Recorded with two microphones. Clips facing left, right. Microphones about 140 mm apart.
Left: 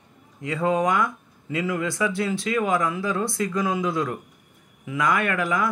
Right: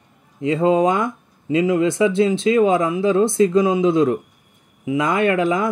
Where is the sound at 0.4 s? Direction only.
25° right (ahead or behind).